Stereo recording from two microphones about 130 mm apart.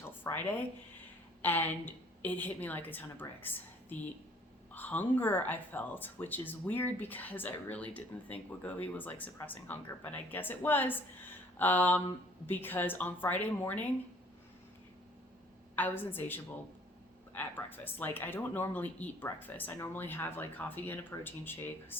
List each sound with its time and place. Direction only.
0.3 s speech: 25° left (ahead or behind)
1.4 s speech: 15° left (ahead or behind)
15.7 s speech: 15° left (ahead or behind)